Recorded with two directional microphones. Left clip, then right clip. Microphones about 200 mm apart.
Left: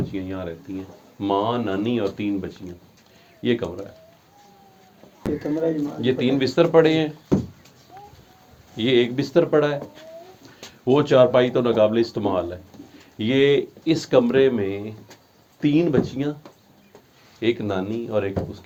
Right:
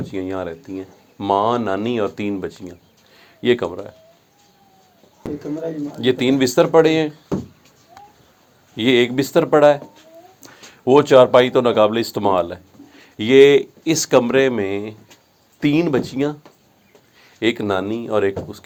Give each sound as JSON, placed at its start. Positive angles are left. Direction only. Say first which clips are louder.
{"t": 0.1, "sound": "speech", "louder": "right 5 dB", "side_deg": -50}
{"t": 6.0, "sound": "speech", "louder": "right 6 dB", "side_deg": -50}
{"t": 8.7, "sound": "speech", "louder": "right 4 dB", "side_deg": -50}
{"t": 17.4, "sound": "speech", "louder": "right 4 dB", "side_deg": -55}